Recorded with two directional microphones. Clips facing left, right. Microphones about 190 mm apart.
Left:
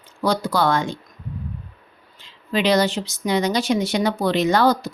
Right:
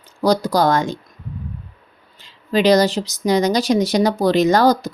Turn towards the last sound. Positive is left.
turn(degrees=-40)  # may be behind; listen again after turning